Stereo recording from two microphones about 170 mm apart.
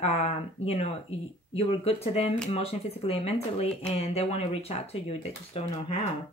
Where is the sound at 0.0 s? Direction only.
40° left (ahead or behind).